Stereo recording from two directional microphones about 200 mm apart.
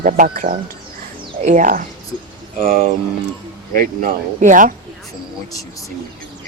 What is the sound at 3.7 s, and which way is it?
Speech, 40° right (ahead or behind).